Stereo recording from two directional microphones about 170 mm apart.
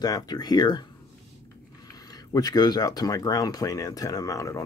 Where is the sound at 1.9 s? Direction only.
20° left (ahead or behind).